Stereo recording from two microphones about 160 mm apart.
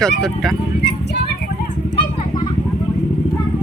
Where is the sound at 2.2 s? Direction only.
25° left (ahead or behind).